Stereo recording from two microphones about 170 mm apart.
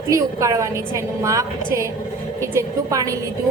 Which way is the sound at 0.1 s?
20° right (ahead or behind).